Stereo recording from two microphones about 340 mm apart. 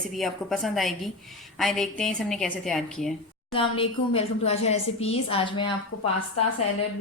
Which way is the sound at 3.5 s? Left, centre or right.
Centre.